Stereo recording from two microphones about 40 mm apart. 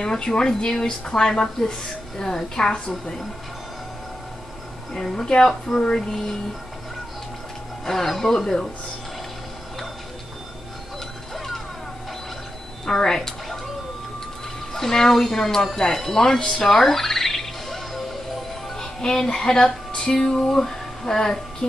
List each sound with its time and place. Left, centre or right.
0.0 s speech: centre
5.1 s speech: centre
7.8 s speech: centre
11.3 s a sound: centre
12.8 s speech: centre
14.7 s speech: centre
16.6 s music: centre
18.8 s speech: centre
20.2 s music: centre